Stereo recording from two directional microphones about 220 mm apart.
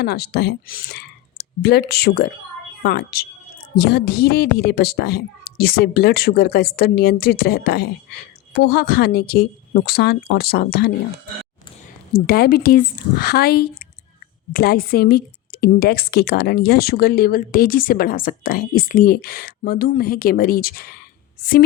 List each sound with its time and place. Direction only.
0.0 s speech: 45° left (ahead or behind)
12.1 s speech: 45° left (ahead or behind)